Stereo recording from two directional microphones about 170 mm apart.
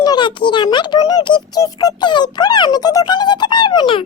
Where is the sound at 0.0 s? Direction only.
25° left (ahead or behind).